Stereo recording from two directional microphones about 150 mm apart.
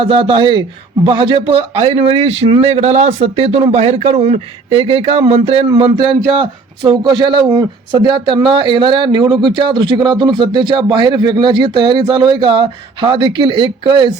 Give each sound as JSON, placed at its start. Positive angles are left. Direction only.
{"t": 0.0, "sound": "speech", "side_deg": -35}